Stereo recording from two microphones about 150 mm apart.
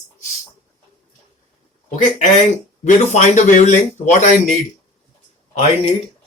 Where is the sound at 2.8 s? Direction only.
50° left (ahead or behind).